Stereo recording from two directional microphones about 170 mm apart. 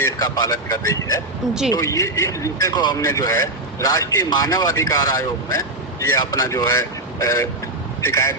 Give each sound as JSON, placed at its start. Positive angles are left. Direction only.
{"t": 0.0, "sound": "speech", "side_deg": 20}